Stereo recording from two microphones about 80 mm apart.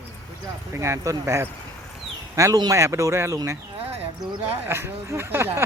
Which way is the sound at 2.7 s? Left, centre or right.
Right.